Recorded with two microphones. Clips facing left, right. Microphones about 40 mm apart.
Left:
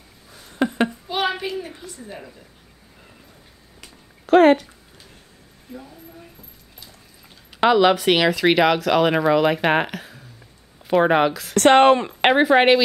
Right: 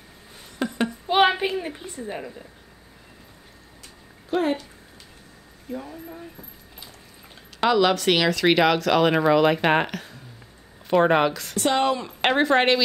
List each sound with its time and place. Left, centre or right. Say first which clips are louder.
0.5 s a sound: left 5 dB; left
1.0 s a sound: right 5 dB; right
1.8 s a woman's voice: right 4 dB; right
4.3 s speech: left 11 dB; left
5.8 s a woman's voice: right 2 dB; right
7.6 s speech: left 4 dB; centre
11.5 s speech: left 11 dB; left
12.2 s speech: left 4 dB; centre